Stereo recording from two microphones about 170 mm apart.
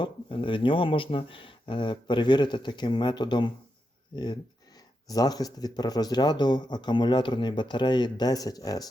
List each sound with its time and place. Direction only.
0.0 s speech: 30° left (ahead or behind)